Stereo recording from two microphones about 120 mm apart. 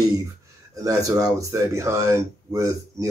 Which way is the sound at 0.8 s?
30° right (ahead or behind).